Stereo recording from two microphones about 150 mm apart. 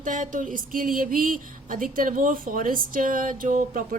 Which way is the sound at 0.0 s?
60° right (ahead or behind).